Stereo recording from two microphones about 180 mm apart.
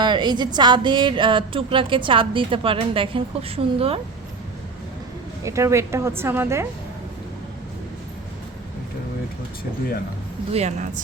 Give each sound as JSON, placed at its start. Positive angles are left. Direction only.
{"t": 0.0, "sound": "speech", "side_deg": -25}
{"t": 5.5, "sound": "a woman's voice", "side_deg": -15}
{"t": 10.5, "sound": "speech", "side_deg": -40}